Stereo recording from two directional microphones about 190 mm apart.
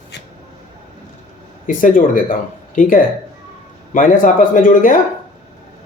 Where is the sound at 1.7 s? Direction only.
45° left (ahead or behind).